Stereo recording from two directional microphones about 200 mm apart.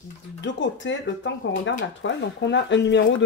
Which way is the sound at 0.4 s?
65° left (ahead or behind).